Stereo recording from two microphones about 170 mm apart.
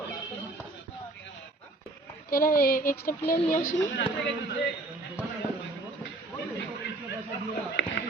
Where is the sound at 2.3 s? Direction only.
60° left (ahead or behind).